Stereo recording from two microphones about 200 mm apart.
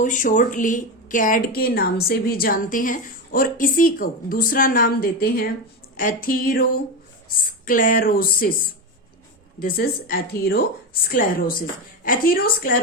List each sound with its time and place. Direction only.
0.0 s speech: 40° left (ahead or behind)
9.6 s speech: 45° left (ahead or behind)